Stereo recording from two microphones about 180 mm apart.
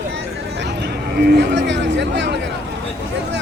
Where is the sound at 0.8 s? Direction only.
65° right (ahead or behind).